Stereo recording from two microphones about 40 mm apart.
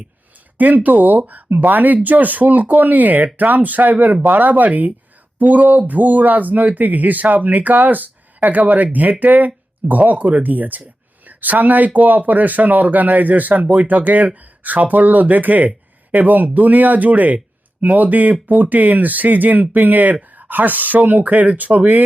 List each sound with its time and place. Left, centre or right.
0.6 s speech: right